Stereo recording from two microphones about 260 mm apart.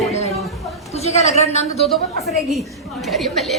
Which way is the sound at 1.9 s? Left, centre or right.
Centre.